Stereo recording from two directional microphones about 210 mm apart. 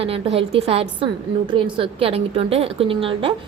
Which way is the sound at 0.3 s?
25° right (ahead or behind).